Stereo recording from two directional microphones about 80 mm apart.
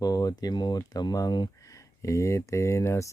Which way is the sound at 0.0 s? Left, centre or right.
Left.